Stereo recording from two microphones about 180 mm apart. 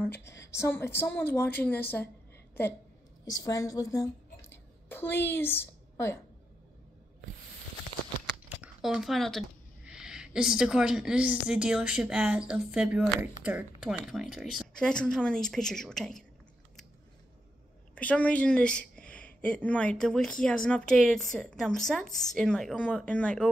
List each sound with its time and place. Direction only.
0.2 s a woman's voice: 15° left (ahead or behind)
3.3 s a woman's voice: 20° left (ahead or behind)
8.5 s a sound: 5° right (ahead or behind)
9.8 s a woman's voice: 5° right (ahead or behind)
17.9 s a woman's voice: 10° left (ahead or behind)